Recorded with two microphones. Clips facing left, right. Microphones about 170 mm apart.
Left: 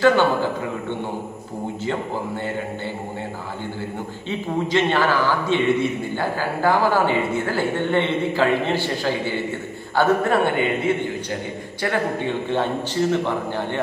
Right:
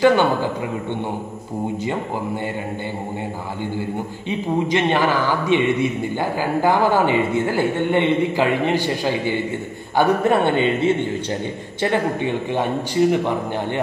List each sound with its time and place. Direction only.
0.0 s a man's voice: 15° right (ahead or behind)
4.3 s a man's voice: 15° right (ahead or behind)
11.8 s a man's voice: 20° right (ahead or behind)